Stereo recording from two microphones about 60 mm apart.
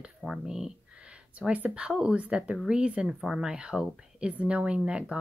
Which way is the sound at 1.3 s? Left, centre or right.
Right.